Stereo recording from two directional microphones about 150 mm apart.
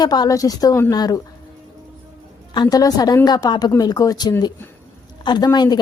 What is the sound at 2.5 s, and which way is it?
A woman's voice, 25° left (ahead or behind).